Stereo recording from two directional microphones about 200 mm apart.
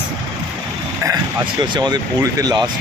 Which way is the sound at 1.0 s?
20° right (ahead or behind).